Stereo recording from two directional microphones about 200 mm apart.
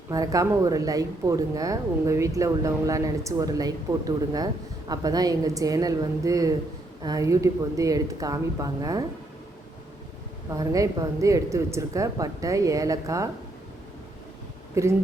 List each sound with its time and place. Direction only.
0.1 s speech: 15° right (ahead or behind)
10.5 s speech: 15° right (ahead or behind)
14.8 s speech: 15° right (ahead or behind)